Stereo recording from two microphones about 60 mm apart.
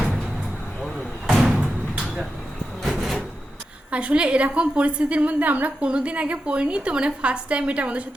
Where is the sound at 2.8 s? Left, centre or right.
Centre.